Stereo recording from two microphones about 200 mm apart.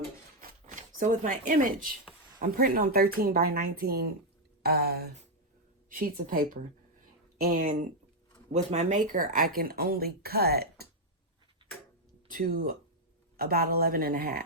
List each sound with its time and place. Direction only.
0.4 s speech: 40° right (ahead or behind)
12.3 s speech: 45° right (ahead or behind)